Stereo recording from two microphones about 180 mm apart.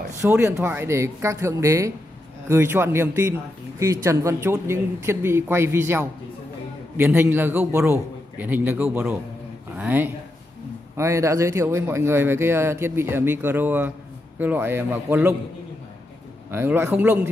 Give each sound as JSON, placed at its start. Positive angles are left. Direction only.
{"t": 0.2, "sound": "speech", "side_deg": -15}
{"t": 16.4, "sound": "speech", "side_deg": -10}